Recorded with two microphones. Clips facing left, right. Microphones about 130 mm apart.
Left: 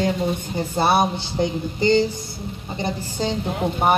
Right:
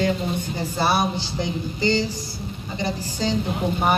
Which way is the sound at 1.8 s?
55° left (ahead or behind).